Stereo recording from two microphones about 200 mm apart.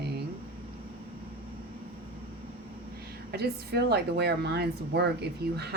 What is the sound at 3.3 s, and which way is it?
A woman's voice, 55° right (ahead or behind).